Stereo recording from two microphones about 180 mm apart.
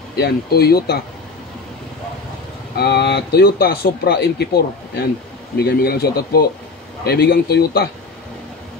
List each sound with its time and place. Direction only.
0.2 s speech: 60° left (ahead or behind)
2.7 s speech: 65° left (ahead or behind)